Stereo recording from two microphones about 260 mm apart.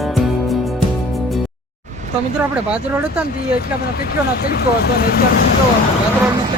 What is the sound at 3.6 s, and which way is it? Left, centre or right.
Speech, left.